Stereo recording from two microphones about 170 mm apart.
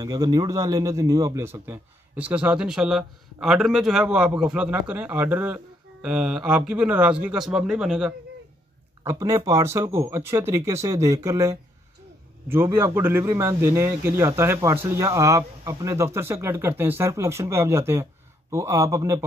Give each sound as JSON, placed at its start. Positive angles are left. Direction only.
{"t": 0.0, "sound": "a man's voice", "side_deg": -20}
{"t": 9.0, "sound": "a man's voice", "side_deg": -20}